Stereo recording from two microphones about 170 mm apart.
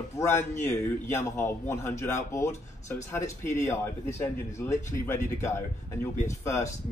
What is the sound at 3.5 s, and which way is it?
A man's voice, 15° left (ahead or behind).